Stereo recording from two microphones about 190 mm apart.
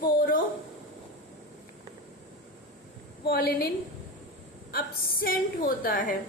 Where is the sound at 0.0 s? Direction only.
45° left (ahead or behind).